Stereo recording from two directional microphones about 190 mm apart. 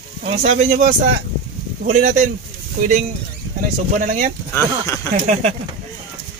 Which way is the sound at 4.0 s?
45° right (ahead or behind).